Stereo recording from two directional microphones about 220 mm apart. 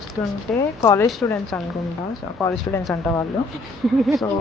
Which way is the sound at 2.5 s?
10° left (ahead or behind).